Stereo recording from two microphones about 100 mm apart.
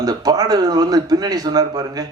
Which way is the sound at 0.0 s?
40° right (ahead or behind).